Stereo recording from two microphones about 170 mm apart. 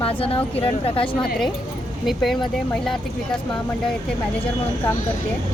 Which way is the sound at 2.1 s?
Centre (ahead or behind).